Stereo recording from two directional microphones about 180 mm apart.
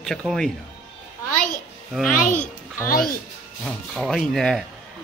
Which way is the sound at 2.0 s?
45° left (ahead or behind).